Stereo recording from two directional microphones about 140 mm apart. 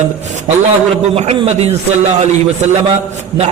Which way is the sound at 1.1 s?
45° right (ahead or behind).